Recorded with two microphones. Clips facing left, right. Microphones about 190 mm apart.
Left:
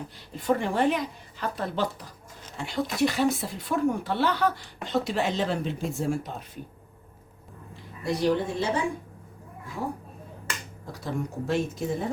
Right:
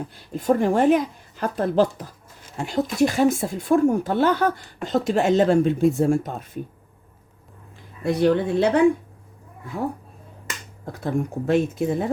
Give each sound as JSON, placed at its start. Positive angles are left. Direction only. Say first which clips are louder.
{"t": 0.3, "sound": "speech", "louder": "right 6 dB", "side_deg": -45}
{"t": 8.0, "sound": "speech", "louder": "right 6 dB", "side_deg": -60}
{"t": 10.9, "sound": "speech", "louder": "right 6 dB", "side_deg": -55}